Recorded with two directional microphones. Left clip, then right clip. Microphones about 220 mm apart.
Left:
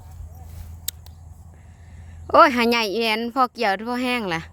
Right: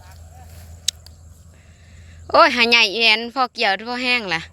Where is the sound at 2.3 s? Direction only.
20° left (ahead or behind).